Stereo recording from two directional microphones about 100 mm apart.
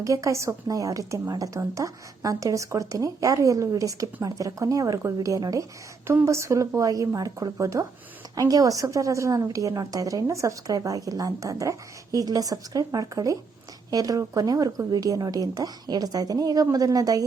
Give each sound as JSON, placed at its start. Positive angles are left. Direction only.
{"t": 0.0, "sound": "a woman's voice", "side_deg": -35}